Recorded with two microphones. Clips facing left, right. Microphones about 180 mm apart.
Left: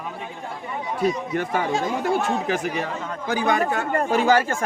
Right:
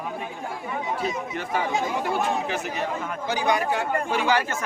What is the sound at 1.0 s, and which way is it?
Speech, 50° left (ahead or behind).